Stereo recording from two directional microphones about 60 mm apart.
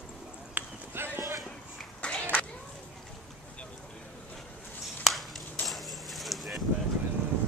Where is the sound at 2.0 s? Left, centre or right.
Centre.